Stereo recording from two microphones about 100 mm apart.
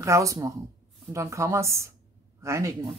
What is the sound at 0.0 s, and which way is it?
Speech, 30° right (ahead or behind).